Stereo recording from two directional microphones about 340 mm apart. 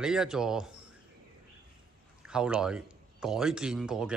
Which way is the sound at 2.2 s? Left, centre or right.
Centre.